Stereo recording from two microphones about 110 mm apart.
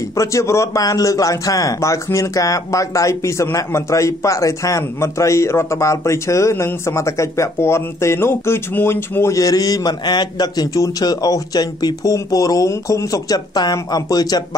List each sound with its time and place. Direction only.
0.2 s a man's voice: 30° left (ahead or behind)